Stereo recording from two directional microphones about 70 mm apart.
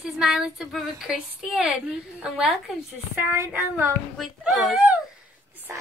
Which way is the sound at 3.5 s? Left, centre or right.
Right.